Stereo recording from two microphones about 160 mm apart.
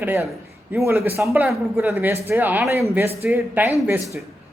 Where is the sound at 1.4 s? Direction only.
Centre (ahead or behind).